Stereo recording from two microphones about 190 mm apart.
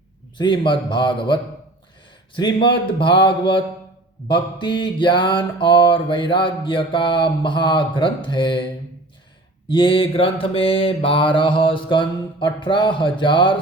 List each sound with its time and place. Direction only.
0.3 s mantra: 25° left (ahead or behind)
9.6 s mantra: 25° left (ahead or behind)